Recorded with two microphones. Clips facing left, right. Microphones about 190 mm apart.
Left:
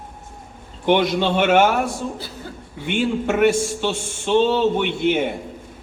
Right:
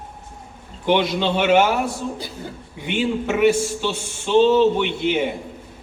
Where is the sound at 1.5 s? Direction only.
50° left (ahead or behind).